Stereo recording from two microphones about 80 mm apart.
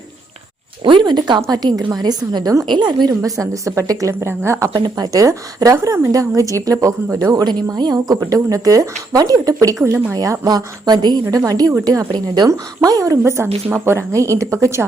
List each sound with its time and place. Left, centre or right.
0.9 s speech: right
1.5 s a woman's voice: right
2.6 s a woman's voice: right
3.2 s a woman's voice: right
4.7 s a woman's voice: right
7.4 s a woman's voice: right
9.8 s speech: right
10.2 s a woman's voice: right
12.5 s a woman's voice: right